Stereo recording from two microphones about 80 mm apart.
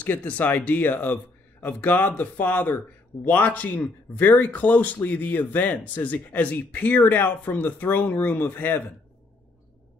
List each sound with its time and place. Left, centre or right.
0.0 s speech: left